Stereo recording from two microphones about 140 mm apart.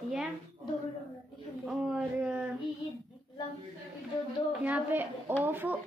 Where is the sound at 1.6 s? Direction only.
5° right (ahead or behind).